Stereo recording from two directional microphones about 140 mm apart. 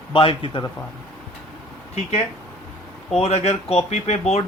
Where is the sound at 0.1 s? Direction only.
40° left (ahead or behind).